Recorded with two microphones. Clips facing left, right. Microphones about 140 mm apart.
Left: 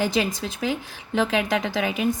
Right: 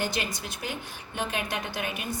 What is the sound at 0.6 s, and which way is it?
Speech, 90° left.